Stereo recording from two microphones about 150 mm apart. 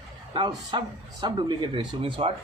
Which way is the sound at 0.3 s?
30° right (ahead or behind).